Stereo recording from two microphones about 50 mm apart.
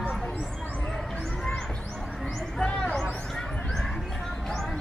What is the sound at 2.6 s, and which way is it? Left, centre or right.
Hubbub, centre.